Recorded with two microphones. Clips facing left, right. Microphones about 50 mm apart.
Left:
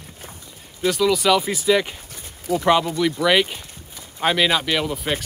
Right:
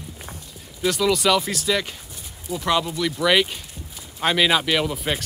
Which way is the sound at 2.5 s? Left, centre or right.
Left.